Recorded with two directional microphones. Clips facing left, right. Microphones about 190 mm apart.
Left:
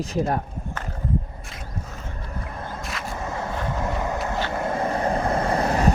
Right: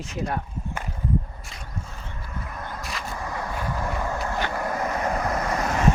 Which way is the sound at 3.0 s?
25° left (ahead or behind).